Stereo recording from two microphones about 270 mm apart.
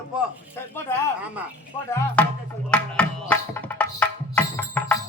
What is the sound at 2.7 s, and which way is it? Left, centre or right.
Music, centre.